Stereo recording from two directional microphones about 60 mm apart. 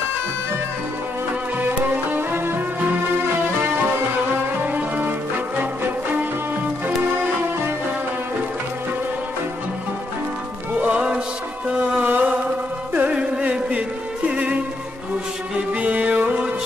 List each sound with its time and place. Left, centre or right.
1.6 s music: right
4.6 s music: right
10.7 s music: right
11.9 s music: right
15.7 s music: right